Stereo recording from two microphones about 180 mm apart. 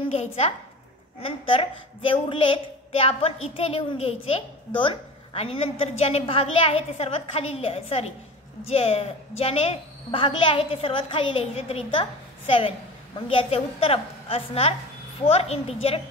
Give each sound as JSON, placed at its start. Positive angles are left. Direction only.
{"t": 0.0, "sound": "a woman's voice", "side_deg": 35}